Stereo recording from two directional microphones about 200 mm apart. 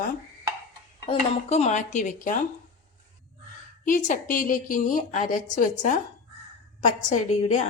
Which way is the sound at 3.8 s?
40° left (ahead or behind).